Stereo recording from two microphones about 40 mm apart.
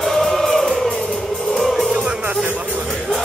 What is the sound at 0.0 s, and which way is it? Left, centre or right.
Music, centre.